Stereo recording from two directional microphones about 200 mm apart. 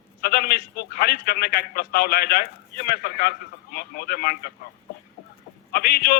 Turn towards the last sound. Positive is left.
turn(degrees=50)  # may be behind; listen again after turning